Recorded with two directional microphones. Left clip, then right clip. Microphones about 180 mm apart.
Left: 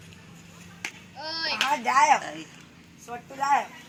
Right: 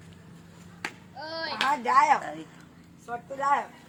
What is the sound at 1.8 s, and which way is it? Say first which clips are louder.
Speech: left 1 dB; 25° left (ahead or behind).